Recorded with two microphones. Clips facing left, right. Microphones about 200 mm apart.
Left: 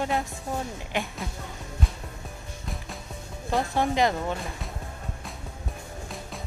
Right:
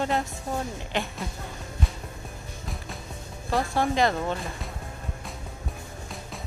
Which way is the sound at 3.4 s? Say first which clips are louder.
Even; 15° left (ahead or behind).